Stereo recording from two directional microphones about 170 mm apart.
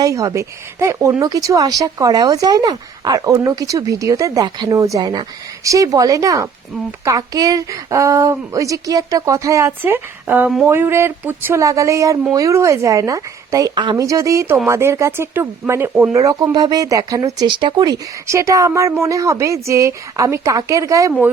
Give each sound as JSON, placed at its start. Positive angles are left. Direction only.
{"t": 0.0, "sound": "speech", "side_deg": -20}